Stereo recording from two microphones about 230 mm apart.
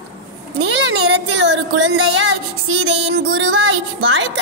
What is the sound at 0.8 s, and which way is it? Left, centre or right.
A woman's voice, right.